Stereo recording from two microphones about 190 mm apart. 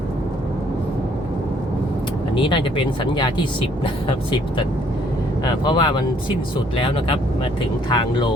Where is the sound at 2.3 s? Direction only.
25° left (ahead or behind).